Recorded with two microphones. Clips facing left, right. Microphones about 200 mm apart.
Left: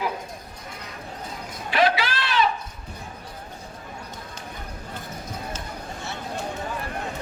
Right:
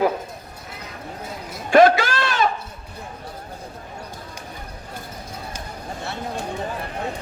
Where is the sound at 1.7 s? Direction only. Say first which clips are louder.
Right 8 dB; 45° right (ahead or behind).